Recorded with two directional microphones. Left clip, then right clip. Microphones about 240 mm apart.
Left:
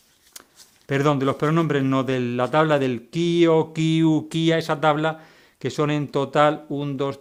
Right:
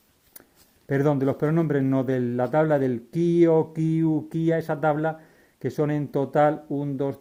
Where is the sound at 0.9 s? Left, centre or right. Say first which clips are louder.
Left 2 dB; left.